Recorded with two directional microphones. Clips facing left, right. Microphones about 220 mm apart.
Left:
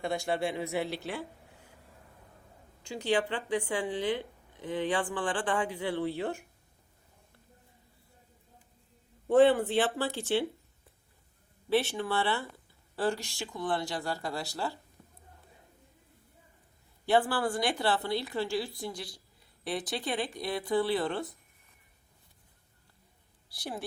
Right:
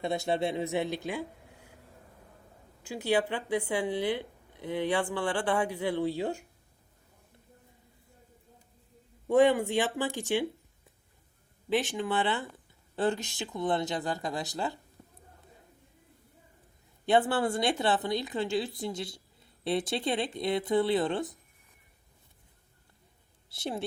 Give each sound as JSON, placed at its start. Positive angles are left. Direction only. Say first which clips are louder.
{"t": 0.0, "sound": "speech", "louder": "right 2 dB", "side_deg": -20}
{"t": 2.9, "sound": "speech", "louder": "right 1 dB", "side_deg": -10}
{"t": 9.3, "sound": "speech", "louder": "left 1 dB", "side_deg": -15}
{"t": 11.7, "sound": "speech", "louder": "even", "side_deg": -15}
{"t": 15.0, "sound": "a sound", "louder": "right 3 dB", "side_deg": -35}
{"t": 17.1, "sound": "speech", "louder": "right 2 dB", "side_deg": -20}
{"t": 23.5, "sound": "speech", "louder": "right 4 dB", "side_deg": -25}